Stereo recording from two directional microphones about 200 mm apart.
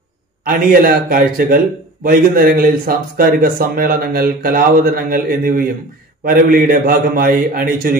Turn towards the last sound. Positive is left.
turn(degrees=-45)  # may be behind; listen again after turning